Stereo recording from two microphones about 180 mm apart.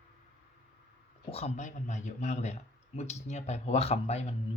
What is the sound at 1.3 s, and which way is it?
Speech, 40° left (ahead or behind).